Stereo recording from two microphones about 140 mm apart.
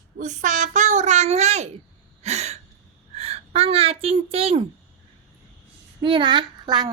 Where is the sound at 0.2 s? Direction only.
60° right (ahead or behind); by 4.6 s 40° right (ahead or behind).